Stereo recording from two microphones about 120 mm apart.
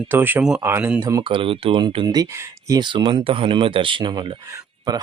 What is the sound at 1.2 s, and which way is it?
Speech, 45° right (ahead or behind).